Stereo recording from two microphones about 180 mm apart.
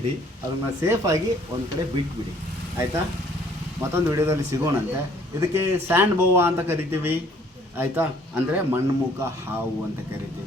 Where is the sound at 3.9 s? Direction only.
15° right (ahead or behind).